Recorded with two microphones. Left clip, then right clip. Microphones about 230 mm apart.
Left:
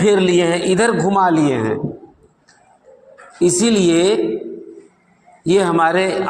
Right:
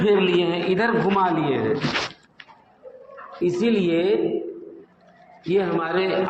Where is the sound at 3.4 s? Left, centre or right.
Left.